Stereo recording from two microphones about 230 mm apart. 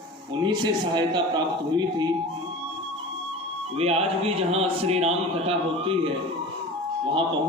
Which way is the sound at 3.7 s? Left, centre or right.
Right.